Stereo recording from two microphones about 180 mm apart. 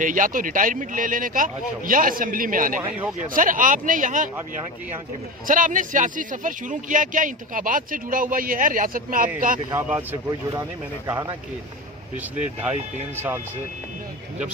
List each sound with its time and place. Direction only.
0.0 s a man's voice: 45° right (ahead or behind)
5.5 s a man's voice: 45° right (ahead or behind)
9.7 s speech: 15° right (ahead or behind)
12.4 s speech: 40° right (ahead or behind)
13.1 s speech: 10° right (ahead or behind)